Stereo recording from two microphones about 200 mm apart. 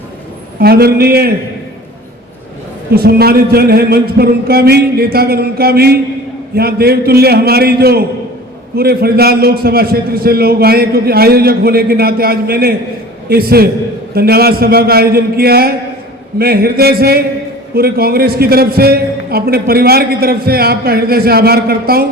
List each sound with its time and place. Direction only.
0.6 s a man's voice: 50° right (ahead or behind)
2.9 s a man's voice: 50° right (ahead or behind)